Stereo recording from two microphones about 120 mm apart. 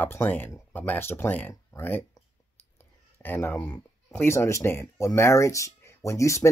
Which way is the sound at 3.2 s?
20° left (ahead or behind).